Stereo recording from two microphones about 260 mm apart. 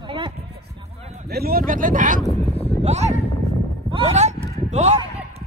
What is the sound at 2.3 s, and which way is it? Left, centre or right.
Speech, centre.